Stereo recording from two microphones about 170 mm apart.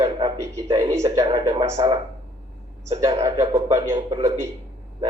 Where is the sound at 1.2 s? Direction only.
20° right (ahead or behind).